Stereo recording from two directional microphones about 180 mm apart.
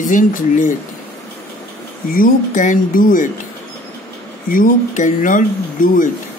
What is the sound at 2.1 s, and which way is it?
Speech, 50° left (ahead or behind).